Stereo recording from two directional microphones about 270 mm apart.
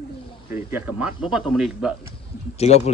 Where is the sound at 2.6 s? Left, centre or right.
Left.